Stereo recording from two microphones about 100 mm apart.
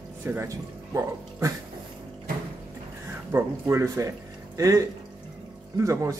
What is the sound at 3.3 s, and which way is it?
Speech, 25° right (ahead or behind).